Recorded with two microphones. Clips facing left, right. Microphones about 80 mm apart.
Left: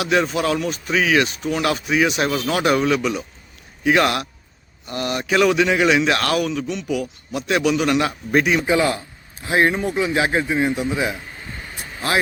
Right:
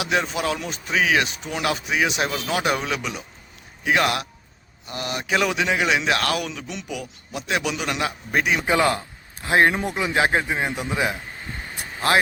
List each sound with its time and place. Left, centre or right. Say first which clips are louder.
0.0 s speech: left 4 dB; centre
8.6 s a man's voice: left 1 dB; right